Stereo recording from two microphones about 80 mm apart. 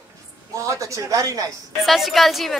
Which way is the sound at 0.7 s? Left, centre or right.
Right.